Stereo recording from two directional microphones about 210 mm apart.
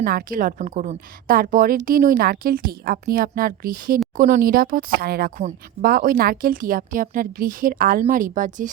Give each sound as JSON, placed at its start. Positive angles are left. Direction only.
{"t": 0.0, "sound": "a woman's voice", "side_deg": -45}